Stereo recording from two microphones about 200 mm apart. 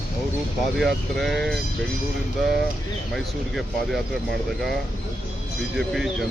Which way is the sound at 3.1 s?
Centre (ahead or behind).